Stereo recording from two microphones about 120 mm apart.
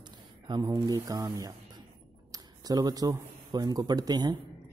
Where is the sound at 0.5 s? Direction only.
35° right (ahead or behind).